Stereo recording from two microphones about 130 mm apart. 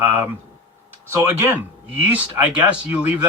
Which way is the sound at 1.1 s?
15° right (ahead or behind).